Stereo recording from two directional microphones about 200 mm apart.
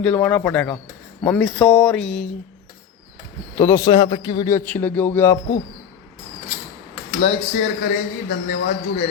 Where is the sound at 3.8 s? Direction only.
25° left (ahead or behind).